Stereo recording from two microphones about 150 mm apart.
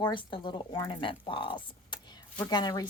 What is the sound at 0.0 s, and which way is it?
Speech, 35° left (ahead or behind).